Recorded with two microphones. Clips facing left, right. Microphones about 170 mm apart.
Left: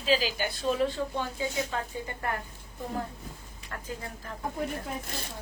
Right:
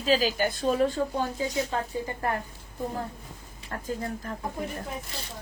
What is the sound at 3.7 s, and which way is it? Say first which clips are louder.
Speech: right 6 dB; 40° right (ahead or behind).